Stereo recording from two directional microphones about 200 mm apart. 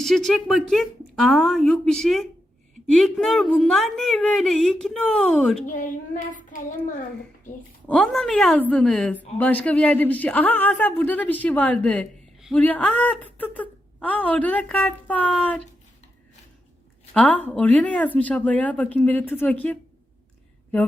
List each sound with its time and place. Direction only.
0.0 s a woman's voice: centre (ahead or behind)
5.6 s speech: 40° left (ahead or behind)
7.9 s a woman's voice: 5° left (ahead or behind)
17.2 s speech: 5° left (ahead or behind)